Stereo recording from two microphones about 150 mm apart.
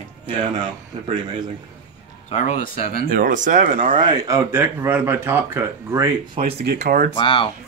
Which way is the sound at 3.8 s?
35° right (ahead or behind).